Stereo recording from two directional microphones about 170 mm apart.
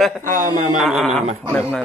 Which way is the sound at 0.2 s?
50° right (ahead or behind).